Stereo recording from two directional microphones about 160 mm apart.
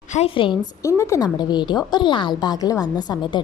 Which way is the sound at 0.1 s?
40° left (ahead or behind).